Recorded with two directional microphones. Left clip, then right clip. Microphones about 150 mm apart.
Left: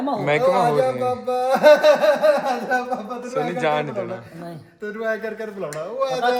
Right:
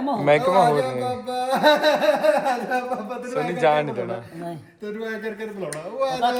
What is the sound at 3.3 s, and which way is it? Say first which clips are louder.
Speech: right 2 dB; 20° left (ahead or behind).